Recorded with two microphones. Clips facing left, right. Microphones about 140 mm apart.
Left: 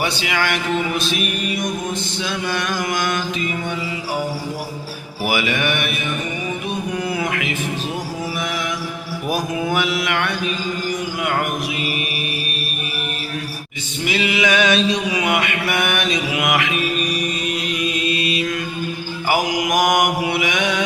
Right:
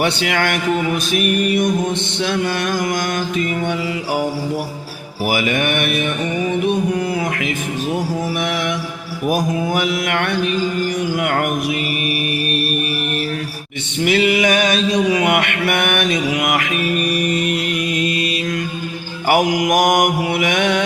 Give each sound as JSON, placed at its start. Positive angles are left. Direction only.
{"t": 0.0, "sound": "music", "side_deg": -55}
{"t": 5.2, "sound": "music", "side_deg": -40}
{"t": 7.2, "sound": "speech", "side_deg": -40}
{"t": 8.4, "sound": "mantra", "side_deg": -65}
{"t": 9.3, "sound": "music", "side_deg": -45}
{"t": 14.0, "sound": "mantra", "side_deg": -55}
{"t": 17.0, "sound": "mantra", "side_deg": -60}
{"t": 19.3, "sound": "mantra", "side_deg": -55}